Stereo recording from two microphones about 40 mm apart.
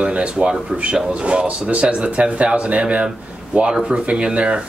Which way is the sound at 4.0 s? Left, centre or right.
Right.